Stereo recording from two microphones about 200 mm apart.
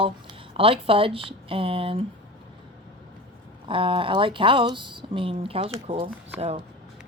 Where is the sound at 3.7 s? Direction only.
25° right (ahead or behind).